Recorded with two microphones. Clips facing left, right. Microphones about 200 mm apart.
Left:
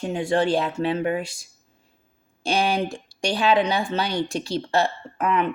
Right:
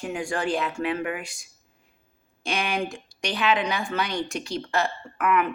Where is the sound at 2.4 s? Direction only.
30° left (ahead or behind).